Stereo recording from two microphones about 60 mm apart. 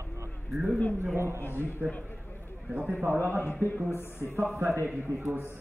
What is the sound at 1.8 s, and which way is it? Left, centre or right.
A man's voice, right.